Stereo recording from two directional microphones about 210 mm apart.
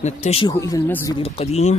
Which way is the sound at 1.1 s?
25° left (ahead or behind).